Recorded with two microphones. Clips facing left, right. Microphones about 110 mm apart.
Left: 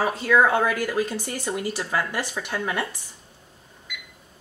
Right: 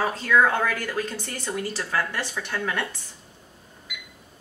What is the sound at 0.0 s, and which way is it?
Speech, 15° left (ahead or behind).